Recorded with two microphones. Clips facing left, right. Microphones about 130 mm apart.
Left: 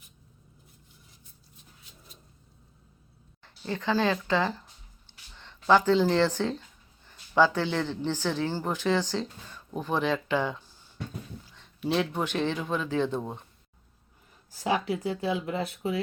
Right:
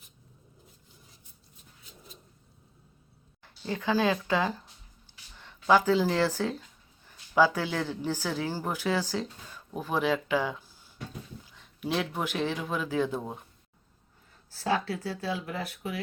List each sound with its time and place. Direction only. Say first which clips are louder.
3.4 s speech: even; 10° right (ahead or behind)
14.5 s speech: left 1 dB; 15° left (ahead or behind)